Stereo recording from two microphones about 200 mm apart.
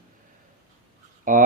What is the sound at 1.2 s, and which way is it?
Speech, 40° right (ahead or behind).